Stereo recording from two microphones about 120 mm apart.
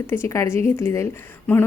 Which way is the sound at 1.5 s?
15° left (ahead or behind).